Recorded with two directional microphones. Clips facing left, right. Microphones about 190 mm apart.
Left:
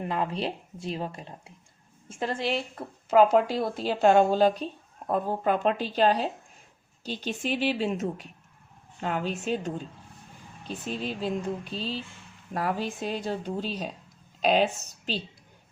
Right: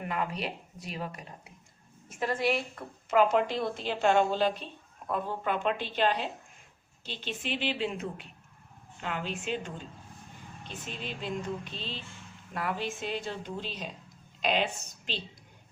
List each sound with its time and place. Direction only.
0.0 s a woman's voice: 30° left (ahead or behind)